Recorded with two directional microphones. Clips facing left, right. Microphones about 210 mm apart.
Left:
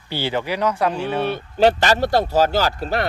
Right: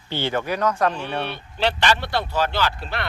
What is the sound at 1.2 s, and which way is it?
Speech, 45° left (ahead or behind).